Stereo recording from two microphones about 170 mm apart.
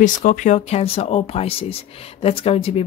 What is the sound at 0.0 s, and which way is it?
Speech, 50° left (ahead or behind).